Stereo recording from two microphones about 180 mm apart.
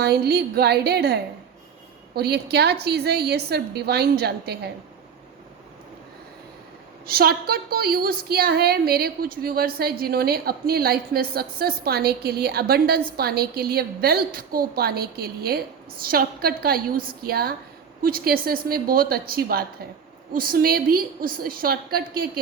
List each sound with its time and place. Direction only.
0.0 s a woman's voice: 60° right (ahead or behind)
7.1 s a woman's voice: 55° right (ahead or behind)